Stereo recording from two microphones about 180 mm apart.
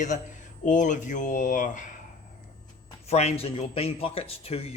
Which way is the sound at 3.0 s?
35° left (ahead or behind).